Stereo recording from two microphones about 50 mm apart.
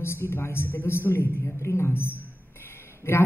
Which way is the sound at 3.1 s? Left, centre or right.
Left.